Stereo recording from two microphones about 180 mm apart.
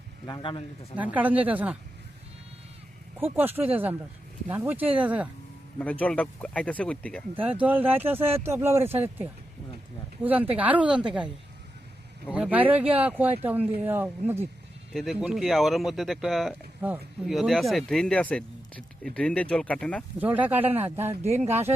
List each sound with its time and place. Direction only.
0.3 s speech: 25° left (ahead or behind)
0.9 s speech: 10° right (ahead or behind)
3.2 s speech: 10° right (ahead or behind)
5.8 s speech: 10° left (ahead or behind)
7.4 s speech: 10° right (ahead or behind)
12.3 s speech: 5° right (ahead or behind)
14.9 s speech: centre (ahead or behind)
20.1 s speech: 10° right (ahead or behind)